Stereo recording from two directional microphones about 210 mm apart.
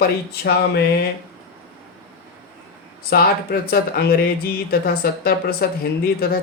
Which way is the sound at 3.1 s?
45° left (ahead or behind).